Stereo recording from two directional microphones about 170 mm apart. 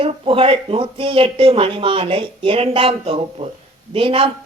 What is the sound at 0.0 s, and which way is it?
Speech, 35° right (ahead or behind).